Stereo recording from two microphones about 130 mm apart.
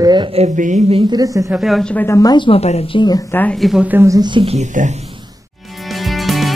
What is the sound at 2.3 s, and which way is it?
Speech, 40° left (ahead or behind).